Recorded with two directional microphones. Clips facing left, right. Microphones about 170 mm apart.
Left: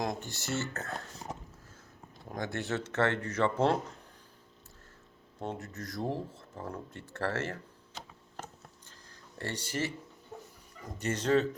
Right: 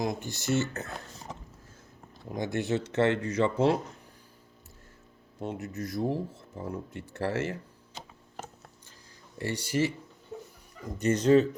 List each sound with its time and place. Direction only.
0.0 s speech: 10° right (ahead or behind)
2.3 s speech: 15° right (ahead or behind)
5.4 s speech: 10° right (ahead or behind)
11.0 s speech: 15° right (ahead or behind)